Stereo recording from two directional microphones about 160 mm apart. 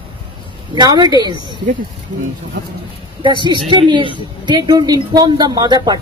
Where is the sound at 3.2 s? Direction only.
30° right (ahead or behind).